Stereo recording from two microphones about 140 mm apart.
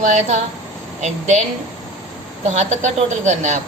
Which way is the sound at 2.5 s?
55° right (ahead or behind).